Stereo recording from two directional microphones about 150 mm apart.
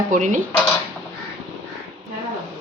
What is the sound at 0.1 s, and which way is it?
Dishes, 55° right (ahead or behind).